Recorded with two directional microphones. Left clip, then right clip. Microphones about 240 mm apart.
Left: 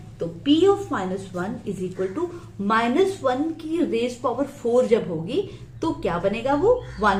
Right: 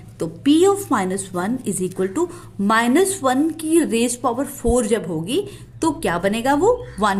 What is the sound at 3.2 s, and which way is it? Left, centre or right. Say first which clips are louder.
A woman's voice: right 5 dB; right.